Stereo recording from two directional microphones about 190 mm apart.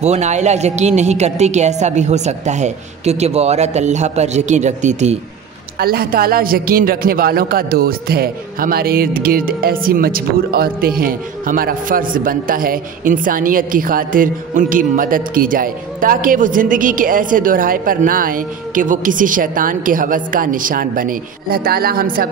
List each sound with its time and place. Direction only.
0.0 s a woman's voice: 35° right (ahead or behind)
5.8 s a man's voice: 50° right (ahead or behind)